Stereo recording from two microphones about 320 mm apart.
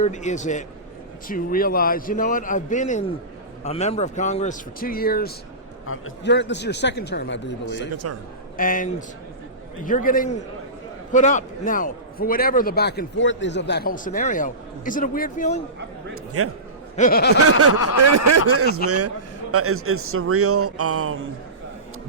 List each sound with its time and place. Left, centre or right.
0.0 s a man's voice: left
7.8 s a man's voice: right
8.5 s a man's voice: left
16.4 s a man's voice: right
17.0 s a man's voice: left
17.9 s a man's voice: right